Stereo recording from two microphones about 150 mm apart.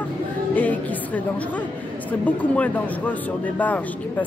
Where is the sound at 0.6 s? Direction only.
10° left (ahead or behind).